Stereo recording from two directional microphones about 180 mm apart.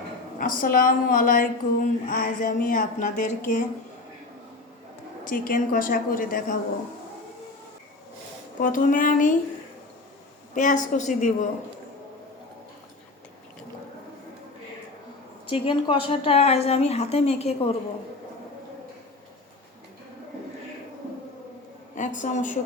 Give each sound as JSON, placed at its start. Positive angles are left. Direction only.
{"t": 0.3, "sound": "speech", "side_deg": 50}
{"t": 5.2, "sound": "speech", "side_deg": 50}
{"t": 8.6, "sound": "speech", "side_deg": 50}
{"t": 10.5, "sound": "speech", "side_deg": 45}
{"t": 15.4, "sound": "a woman's voice", "side_deg": 30}
{"t": 21.9, "sound": "speech", "side_deg": 45}